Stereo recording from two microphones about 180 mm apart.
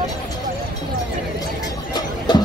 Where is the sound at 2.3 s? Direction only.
25° left (ahead or behind).